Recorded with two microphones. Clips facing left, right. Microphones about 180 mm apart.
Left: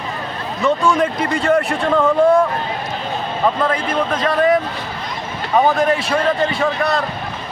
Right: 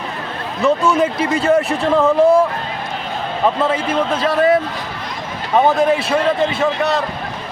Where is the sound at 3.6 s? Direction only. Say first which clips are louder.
Right 1 dB; 5° right (ahead or behind).